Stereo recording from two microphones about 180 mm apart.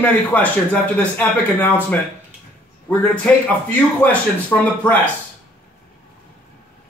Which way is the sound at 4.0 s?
10° left (ahead or behind).